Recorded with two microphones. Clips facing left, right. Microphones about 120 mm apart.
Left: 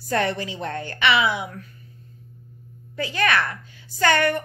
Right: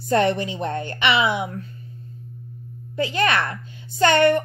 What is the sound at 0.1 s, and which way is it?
A woman's voice, 20° right (ahead or behind).